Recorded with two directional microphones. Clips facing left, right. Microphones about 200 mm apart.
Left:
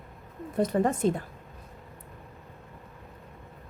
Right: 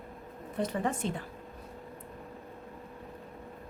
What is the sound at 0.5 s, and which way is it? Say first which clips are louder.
Speech: left 6 dB; 40° left (ahead or behind).